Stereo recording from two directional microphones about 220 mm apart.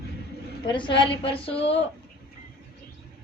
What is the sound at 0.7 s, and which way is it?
A woman's voice, 20° left (ahead or behind).